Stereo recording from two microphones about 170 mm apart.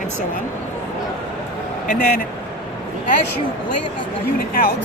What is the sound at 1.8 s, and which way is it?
Speech, 50° left (ahead or behind).